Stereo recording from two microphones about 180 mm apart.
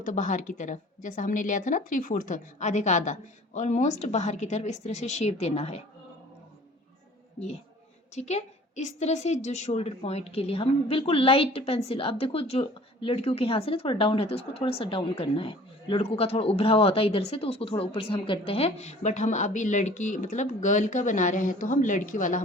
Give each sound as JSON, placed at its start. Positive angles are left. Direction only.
{"t": 0.0, "sound": "a woman's voice", "side_deg": 45}
{"t": 8.1, "sound": "a woman's voice", "side_deg": 40}